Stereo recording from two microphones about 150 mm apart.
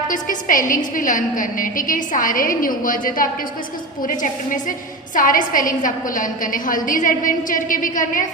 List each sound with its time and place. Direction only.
0.1 s a woman's voice: 60° left (ahead or behind)